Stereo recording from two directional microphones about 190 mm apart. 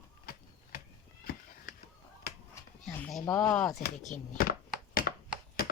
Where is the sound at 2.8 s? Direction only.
Centre (ahead or behind).